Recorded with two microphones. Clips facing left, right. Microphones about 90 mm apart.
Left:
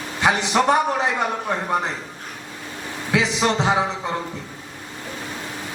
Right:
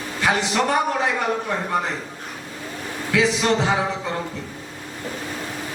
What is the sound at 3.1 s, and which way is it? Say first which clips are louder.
Speech: right 1 dB; 20° left (ahead or behind).